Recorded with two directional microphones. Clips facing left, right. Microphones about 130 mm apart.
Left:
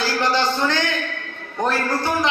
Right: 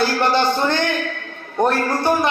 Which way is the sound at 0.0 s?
55° right (ahead or behind).